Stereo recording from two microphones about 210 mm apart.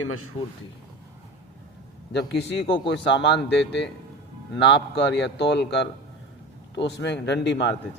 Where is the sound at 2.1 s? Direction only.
55° left (ahead or behind).